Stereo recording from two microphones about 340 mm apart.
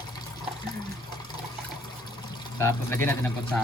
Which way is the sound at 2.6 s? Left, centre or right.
Centre.